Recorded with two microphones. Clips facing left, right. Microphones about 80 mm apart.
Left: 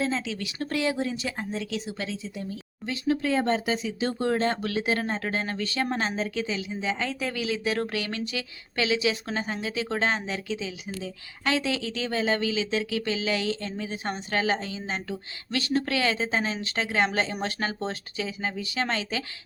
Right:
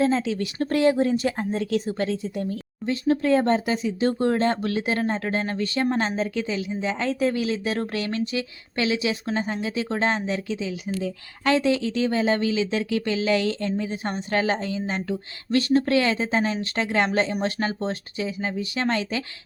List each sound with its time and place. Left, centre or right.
0.0 s speech: right
2.8 s speech: right
6.3 s speech: right
10.6 s speech: right
15.5 s speech: right
16.2 s speech: right
17.4 s speech: right
18.8 s speech: right